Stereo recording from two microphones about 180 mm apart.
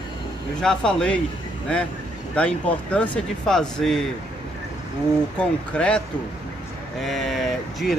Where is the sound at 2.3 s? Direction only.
5° left (ahead or behind).